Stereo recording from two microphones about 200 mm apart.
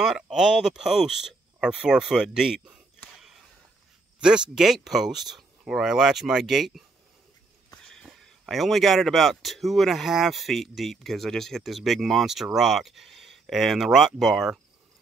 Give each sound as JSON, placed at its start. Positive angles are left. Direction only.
{"t": 0.0, "sound": "speech", "side_deg": -5}